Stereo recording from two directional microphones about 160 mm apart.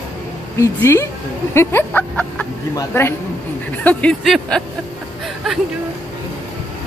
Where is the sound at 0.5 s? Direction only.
15° left (ahead or behind).